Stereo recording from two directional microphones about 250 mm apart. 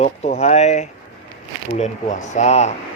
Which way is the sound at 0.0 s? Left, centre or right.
Left.